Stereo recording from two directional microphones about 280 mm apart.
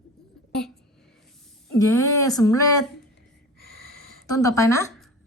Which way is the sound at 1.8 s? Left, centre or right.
Centre.